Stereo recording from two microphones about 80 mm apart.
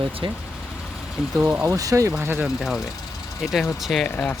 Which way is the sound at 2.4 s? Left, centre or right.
Centre.